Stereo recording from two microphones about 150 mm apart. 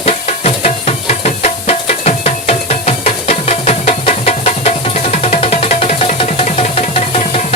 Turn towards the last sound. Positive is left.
turn(degrees=45)  # may be behind; listen again after turning